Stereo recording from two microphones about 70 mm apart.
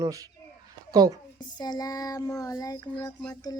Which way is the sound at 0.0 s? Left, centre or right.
Right.